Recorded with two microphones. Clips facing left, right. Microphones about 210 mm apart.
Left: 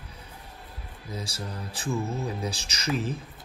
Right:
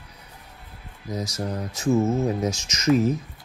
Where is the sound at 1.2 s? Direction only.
30° left (ahead or behind).